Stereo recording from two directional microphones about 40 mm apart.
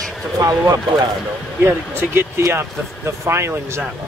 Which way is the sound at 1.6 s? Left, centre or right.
Right.